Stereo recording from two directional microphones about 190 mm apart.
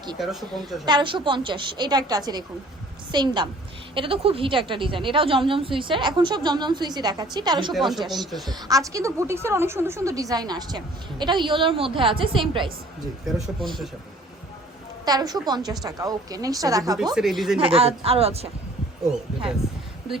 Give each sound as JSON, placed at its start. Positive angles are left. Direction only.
{"t": 0.2, "sound": "a woman's voice", "side_deg": 0}
{"t": 0.9, "sound": "a woman's voice", "side_deg": -25}
{"t": 7.7, "sound": "a woman's voice", "side_deg": 0}
{"t": 8.4, "sound": "a woman's voice", "side_deg": -20}
{"t": 13.2, "sound": "a woman's voice", "side_deg": 0}
{"t": 15.0, "sound": "a woman's voice", "side_deg": -20}
{"t": 17.2, "sound": "a woman's voice", "side_deg": 0}
{"t": 17.6, "sound": "speech", "side_deg": -30}